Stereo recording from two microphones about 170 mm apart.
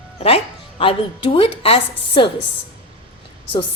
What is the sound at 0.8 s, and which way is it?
A woman's voice, 30° left (ahead or behind).